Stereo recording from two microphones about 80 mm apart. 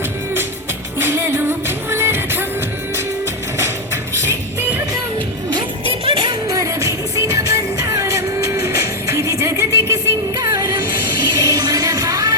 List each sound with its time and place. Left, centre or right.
0.9 s music: right
4.2 s music: right
6.5 s music: right